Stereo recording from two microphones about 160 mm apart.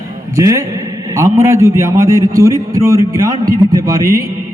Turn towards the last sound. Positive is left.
turn(degrees=-20)  # may be behind; listen again after turning